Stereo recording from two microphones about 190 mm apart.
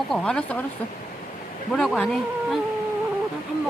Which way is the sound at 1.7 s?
5° left (ahead or behind).